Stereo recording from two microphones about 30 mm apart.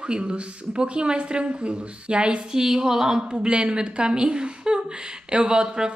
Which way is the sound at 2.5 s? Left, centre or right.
Centre.